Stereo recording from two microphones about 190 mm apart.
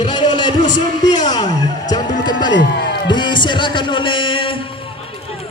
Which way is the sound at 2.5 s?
60° left (ahead or behind).